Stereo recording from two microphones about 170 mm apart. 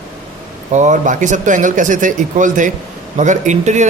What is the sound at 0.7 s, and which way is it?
A man's voice, 45° right (ahead or behind).